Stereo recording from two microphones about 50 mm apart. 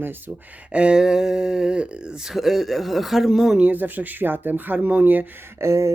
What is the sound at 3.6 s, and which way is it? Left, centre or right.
Speech, right.